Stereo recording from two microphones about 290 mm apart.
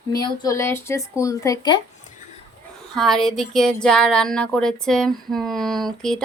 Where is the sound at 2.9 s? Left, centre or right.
Centre.